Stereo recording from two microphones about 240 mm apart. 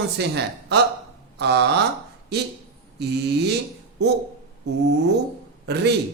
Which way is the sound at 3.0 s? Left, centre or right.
Right.